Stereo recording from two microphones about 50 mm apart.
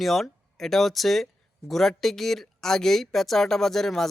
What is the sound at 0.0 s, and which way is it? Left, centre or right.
Speech, centre.